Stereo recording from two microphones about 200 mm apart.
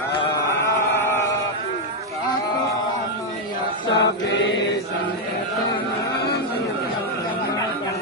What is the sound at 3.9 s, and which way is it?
Chant, 60° left (ahead or behind).